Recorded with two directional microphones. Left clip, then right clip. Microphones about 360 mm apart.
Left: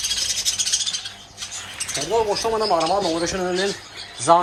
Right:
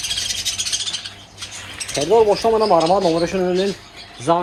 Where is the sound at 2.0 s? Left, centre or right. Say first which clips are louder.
Right 7 dB; centre.